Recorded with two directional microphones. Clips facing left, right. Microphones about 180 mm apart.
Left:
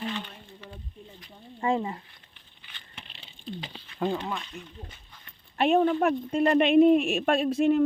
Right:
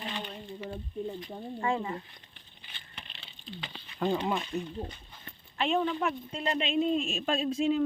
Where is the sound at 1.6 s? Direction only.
25° left (ahead or behind).